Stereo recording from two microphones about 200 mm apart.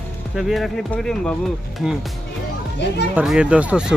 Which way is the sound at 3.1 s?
5° right (ahead or behind).